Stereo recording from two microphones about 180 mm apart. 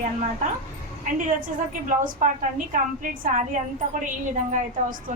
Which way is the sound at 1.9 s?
45° right (ahead or behind).